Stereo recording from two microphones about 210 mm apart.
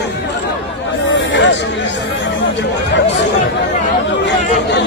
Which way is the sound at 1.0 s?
60° left (ahead or behind).